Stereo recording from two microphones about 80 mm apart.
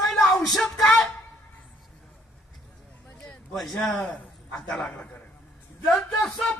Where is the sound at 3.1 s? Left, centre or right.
Centre.